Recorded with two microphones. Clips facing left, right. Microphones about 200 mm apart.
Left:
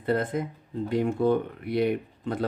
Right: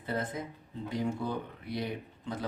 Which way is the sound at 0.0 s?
60° left (ahead or behind).